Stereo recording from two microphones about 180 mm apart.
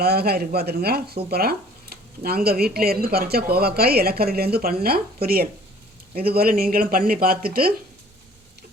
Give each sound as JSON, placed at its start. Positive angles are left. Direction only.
{"t": 0.0, "sound": "speech", "side_deg": -60}